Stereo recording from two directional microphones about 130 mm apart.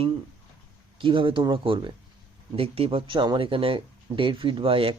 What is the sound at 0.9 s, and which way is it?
Speech, 40° right (ahead or behind).